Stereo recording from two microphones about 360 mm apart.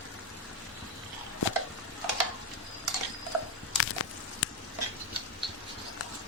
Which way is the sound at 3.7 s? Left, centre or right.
Left.